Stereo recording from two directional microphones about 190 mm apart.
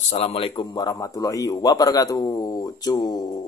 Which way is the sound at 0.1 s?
30° left (ahead or behind).